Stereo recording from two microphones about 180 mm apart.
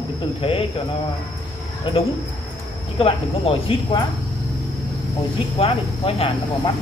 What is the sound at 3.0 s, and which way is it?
Cricket, 30° left (ahead or behind).